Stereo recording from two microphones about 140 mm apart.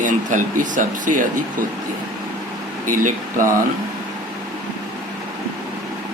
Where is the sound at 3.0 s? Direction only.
70° right (ahead or behind).